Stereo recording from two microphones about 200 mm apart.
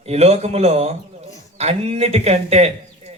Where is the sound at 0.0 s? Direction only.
30° right (ahead or behind).